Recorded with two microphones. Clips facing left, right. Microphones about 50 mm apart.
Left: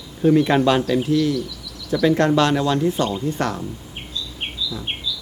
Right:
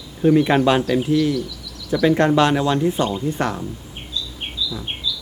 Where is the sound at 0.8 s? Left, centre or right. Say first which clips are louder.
Right 1 dB; centre.